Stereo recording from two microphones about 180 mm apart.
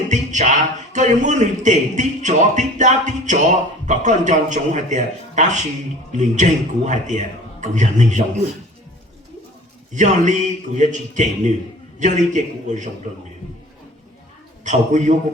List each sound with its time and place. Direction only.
0.1 s speech: 40° right (ahead or behind)
9.9 s a man's voice: 40° right (ahead or behind)
14.6 s speech: 40° right (ahead or behind)